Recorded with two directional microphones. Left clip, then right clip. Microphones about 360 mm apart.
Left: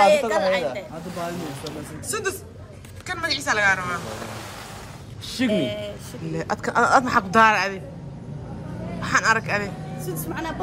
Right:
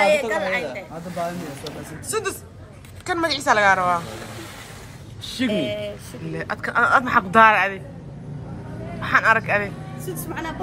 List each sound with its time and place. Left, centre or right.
0.0 s a woman's voice: centre
5.2 s speech: centre
5.5 s speech: centre
9.0 s speech: centre